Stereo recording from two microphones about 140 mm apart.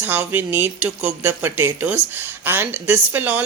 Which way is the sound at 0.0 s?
15° right (ahead or behind).